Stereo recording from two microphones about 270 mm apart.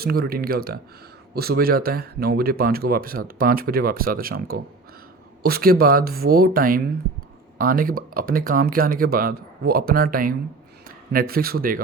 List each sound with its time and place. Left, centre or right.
0.0 s speech: right